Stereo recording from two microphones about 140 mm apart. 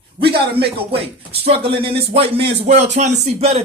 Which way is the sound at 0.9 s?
45° right (ahead or behind).